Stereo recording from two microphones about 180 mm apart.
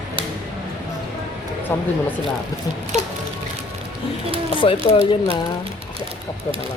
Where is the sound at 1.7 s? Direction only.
10° left (ahead or behind).